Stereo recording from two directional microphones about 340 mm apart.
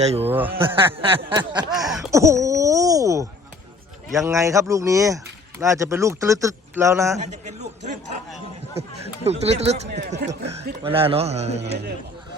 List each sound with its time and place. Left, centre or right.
0.0 s speech: centre
0.3 s a man's voice: centre
7.4 s a man's voice: right
11.6 s speech: right